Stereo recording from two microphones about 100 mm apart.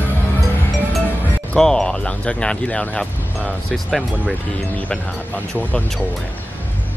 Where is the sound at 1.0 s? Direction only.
15° left (ahead or behind).